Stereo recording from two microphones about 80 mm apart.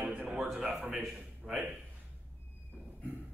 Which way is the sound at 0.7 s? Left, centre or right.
Right.